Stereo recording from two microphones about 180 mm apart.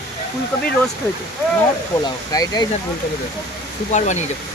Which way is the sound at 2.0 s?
20° left (ahead or behind).